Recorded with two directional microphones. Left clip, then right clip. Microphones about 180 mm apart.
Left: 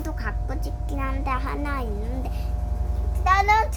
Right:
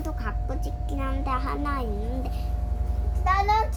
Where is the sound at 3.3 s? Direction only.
50° left (ahead or behind).